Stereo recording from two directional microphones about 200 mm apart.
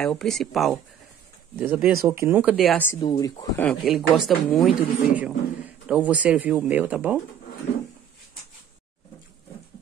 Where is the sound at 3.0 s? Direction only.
20° left (ahead or behind).